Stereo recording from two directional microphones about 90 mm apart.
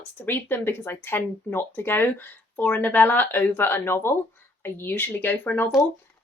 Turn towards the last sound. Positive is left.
turn(degrees=20)  # may be behind; listen again after turning